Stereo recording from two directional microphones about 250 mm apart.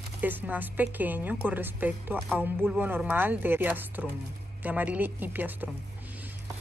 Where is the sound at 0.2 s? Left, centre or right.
Centre.